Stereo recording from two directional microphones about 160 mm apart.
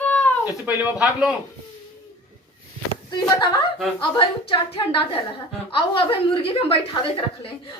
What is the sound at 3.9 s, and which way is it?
A woman's voice, 35° left (ahead or behind).